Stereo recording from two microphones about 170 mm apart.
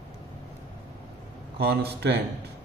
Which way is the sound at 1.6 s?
75° right (ahead or behind).